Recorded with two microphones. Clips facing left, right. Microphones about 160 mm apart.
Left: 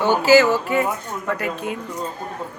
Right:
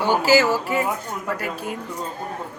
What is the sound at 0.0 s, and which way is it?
Speech, 10° right (ahead or behind).